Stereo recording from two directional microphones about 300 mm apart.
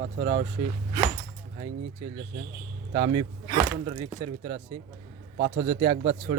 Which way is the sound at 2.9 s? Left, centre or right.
Centre.